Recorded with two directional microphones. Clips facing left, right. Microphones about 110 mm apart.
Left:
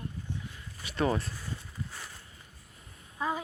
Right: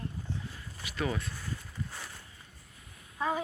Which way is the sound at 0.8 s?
35° left (ahead or behind).